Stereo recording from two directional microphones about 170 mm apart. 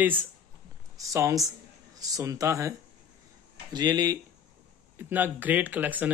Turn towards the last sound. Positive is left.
turn(degrees=-10)  # may be behind; listen again after turning